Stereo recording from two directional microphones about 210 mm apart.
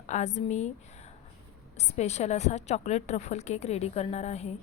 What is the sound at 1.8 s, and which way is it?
A woman's voice, 30° left (ahead or behind).